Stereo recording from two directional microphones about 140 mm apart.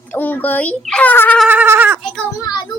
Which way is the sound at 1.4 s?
10° right (ahead or behind).